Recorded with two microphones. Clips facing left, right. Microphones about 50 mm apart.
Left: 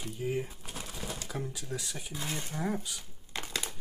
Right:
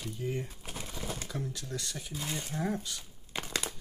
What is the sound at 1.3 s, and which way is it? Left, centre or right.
Speech, centre.